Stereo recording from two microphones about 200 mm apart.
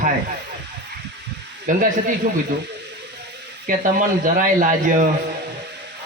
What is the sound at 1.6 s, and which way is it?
Speech, 45° right (ahead or behind).